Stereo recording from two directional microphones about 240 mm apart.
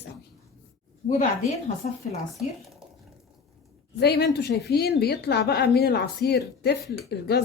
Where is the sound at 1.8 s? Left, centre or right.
Left.